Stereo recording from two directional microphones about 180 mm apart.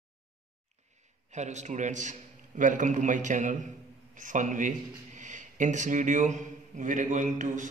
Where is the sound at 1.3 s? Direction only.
40° right (ahead or behind).